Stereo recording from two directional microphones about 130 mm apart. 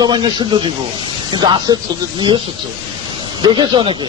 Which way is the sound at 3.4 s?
35° right (ahead or behind).